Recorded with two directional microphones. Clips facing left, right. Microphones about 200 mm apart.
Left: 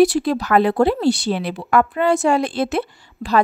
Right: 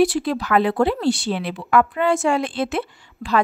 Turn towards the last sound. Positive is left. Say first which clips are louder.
# left 2 dB
turn(degrees=40)  # may be behind; listen again after turning